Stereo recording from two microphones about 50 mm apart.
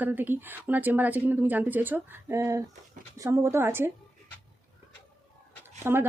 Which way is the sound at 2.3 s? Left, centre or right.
Right.